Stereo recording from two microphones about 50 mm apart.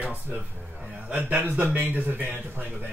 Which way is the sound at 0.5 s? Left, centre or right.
Centre.